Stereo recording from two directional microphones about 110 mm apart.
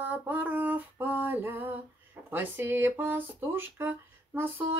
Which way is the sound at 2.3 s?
20° right (ahead or behind).